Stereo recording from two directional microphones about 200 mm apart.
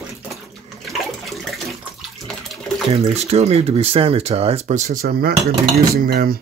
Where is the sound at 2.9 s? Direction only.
30° right (ahead or behind).